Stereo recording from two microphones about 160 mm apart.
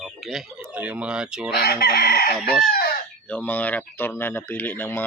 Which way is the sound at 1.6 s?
75° left (ahead or behind).